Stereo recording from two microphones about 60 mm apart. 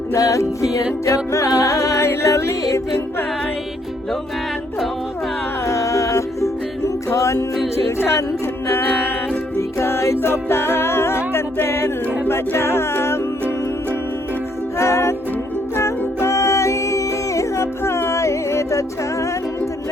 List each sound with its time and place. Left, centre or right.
0.1 s music: left
5.6 s music: left
14.8 s music: left